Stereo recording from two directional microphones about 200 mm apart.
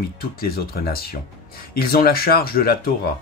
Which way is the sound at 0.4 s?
50° left (ahead or behind).